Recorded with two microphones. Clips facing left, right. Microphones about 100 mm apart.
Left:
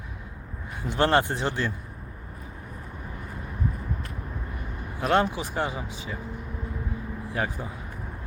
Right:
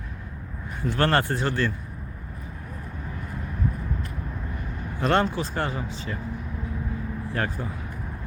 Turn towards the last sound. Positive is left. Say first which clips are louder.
# right 1 dB
turn(degrees=10)  # may be behind; listen again after turning